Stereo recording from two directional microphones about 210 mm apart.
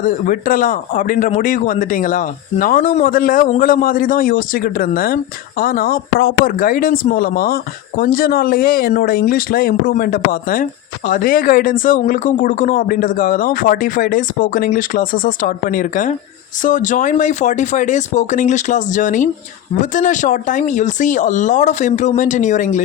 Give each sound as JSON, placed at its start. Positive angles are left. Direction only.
{"t": 0.0, "sound": "speech", "side_deg": 40}